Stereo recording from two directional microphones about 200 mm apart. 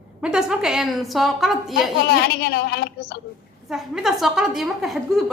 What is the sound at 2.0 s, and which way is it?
A woman's voice, 50° left (ahead or behind).